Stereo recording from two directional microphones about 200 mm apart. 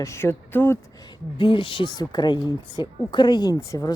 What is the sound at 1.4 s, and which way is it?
Speech, 25° left (ahead or behind).